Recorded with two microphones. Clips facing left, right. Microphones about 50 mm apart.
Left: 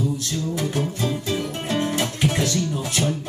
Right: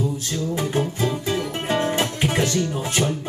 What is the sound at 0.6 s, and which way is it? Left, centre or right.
Music, right.